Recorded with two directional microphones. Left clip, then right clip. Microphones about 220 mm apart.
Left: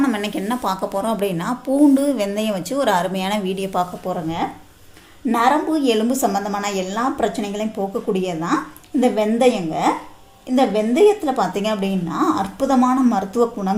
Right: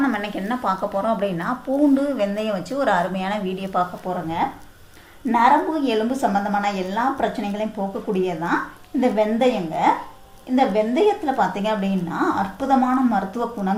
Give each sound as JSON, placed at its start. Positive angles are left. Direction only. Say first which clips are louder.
{"t": 0.0, "sound": "speech", "louder": "left 2 dB", "side_deg": 50}
{"t": 5.2, "sound": "speech", "louder": "right 1 dB", "side_deg": 50}